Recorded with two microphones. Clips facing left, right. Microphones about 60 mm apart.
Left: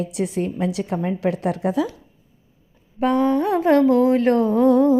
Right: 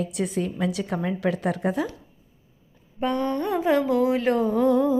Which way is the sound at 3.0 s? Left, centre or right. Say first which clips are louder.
Left 7 dB; left.